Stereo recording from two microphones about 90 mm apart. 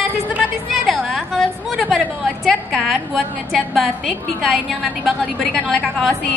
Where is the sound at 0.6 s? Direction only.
Centre (ahead or behind).